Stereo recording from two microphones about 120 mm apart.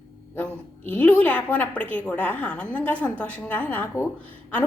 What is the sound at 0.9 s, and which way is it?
A woman's voice, 15° left (ahead or behind).